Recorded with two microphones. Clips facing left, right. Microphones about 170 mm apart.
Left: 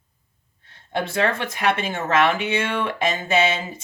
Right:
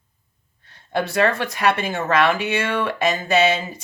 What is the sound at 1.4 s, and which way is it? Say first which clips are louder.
Speech: right 2 dB; 25° left (ahead or behind).